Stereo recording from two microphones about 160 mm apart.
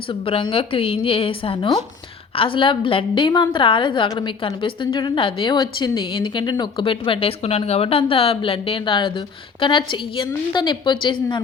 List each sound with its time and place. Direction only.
0.1 s a woman's voice: 35° left (ahead or behind)